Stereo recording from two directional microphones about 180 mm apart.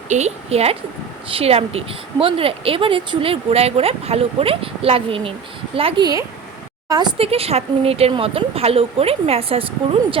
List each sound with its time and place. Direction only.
0.1 s speech: 40° right (ahead or behind)